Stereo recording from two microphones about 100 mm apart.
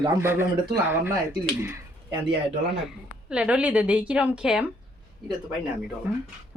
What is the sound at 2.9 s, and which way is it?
A woman's voice, 10° right (ahead or behind).